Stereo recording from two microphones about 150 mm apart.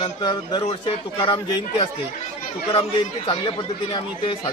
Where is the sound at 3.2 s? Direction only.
35° left (ahead or behind).